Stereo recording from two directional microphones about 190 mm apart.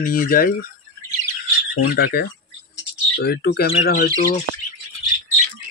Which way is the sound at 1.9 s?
55° left (ahead or behind).